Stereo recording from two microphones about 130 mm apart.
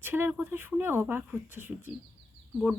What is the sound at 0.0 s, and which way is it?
Speech, 15° right (ahead or behind).